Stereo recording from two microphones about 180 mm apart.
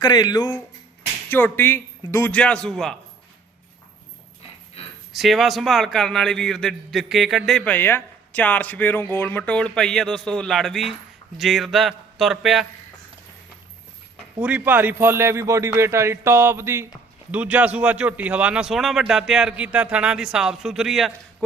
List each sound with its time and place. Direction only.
0.0 s speech: 25° left (ahead or behind)
1.3 s a man's voice: 10° left (ahead or behind)
5.1 s a man's voice: centre (ahead or behind)
14.4 s a man's voice: 10° right (ahead or behind)